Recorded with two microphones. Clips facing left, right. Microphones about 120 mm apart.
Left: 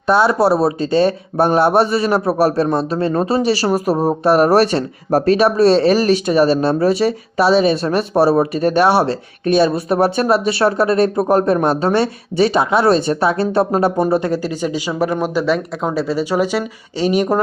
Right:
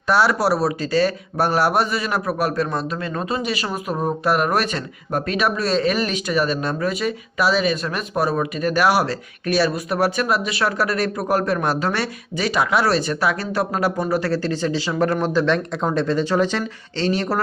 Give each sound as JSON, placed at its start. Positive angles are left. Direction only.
{"t": 0.1, "sound": "speech", "side_deg": 25}